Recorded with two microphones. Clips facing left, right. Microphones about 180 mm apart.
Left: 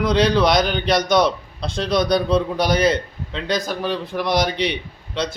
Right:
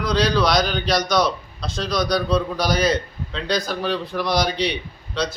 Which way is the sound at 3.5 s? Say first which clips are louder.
Left 1 dB; 50° left (ahead or behind).